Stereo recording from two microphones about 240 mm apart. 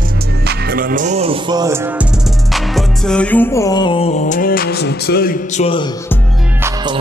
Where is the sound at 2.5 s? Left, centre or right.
Centre; by 5.6 s left.